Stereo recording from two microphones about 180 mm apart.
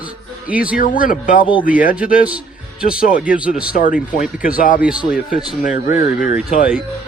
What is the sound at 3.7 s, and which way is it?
Speech, 50° left (ahead or behind).